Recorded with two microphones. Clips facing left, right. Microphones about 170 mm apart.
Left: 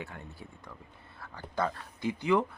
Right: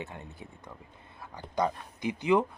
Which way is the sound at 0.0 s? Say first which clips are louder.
Right 2 dB; 20° right (ahead or behind).